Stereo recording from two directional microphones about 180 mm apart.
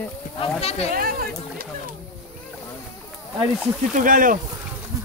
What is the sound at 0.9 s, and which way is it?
Speech, 55° right (ahead or behind).